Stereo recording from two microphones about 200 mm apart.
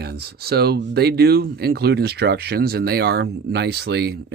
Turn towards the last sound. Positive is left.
turn(degrees=-55)  # may be behind; listen again after turning